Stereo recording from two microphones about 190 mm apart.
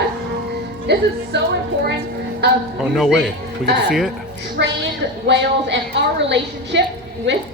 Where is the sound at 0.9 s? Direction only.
60° right (ahead or behind).